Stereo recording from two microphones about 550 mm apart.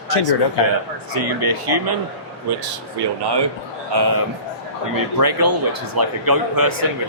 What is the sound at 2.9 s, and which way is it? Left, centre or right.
Speech, right.